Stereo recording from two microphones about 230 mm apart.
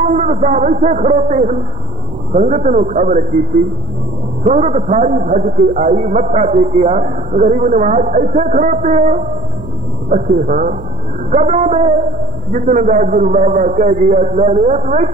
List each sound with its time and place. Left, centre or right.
0.0 s a man's voice: right
4.5 s a man's voice: right